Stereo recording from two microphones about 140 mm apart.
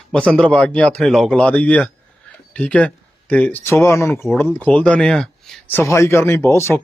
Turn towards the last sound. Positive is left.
turn(degrees=20)  # may be behind; listen again after turning